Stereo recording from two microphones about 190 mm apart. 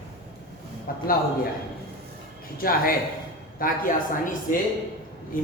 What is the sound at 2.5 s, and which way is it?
Speech, 50° left (ahead or behind).